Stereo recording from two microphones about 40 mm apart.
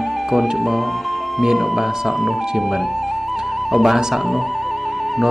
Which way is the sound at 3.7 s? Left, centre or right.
Centre.